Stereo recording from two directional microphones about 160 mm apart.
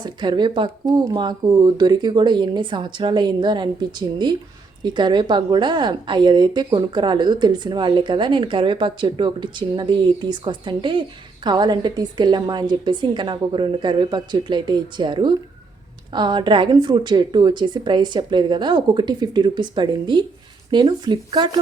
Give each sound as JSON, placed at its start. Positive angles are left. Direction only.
{"t": 0.0, "sound": "a woman's voice", "side_deg": -25}